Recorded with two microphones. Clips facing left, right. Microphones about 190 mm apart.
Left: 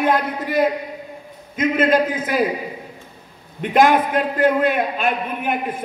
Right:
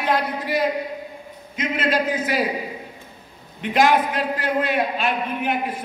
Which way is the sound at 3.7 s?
50° left (ahead or behind).